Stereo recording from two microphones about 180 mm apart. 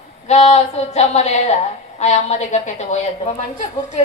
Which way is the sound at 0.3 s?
40° left (ahead or behind).